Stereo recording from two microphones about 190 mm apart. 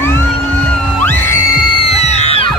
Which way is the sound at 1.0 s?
15° left (ahead or behind).